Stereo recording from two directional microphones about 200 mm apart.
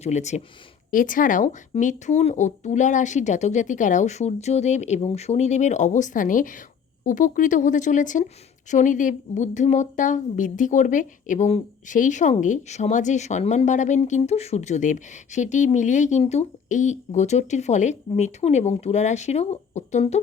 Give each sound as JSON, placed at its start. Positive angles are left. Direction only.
{"t": 0.0, "sound": "a woman's voice", "side_deg": 35}